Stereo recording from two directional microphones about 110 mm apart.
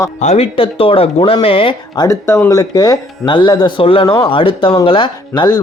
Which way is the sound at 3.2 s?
45° left (ahead or behind).